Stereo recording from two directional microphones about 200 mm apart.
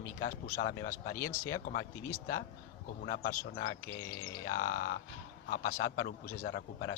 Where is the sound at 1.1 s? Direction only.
15° left (ahead or behind).